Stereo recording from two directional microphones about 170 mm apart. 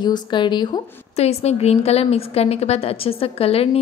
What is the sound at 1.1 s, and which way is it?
A woman's voice, 40° left (ahead or behind).